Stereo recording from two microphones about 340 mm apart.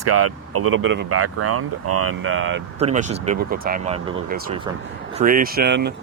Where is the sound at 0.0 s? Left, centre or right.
Right.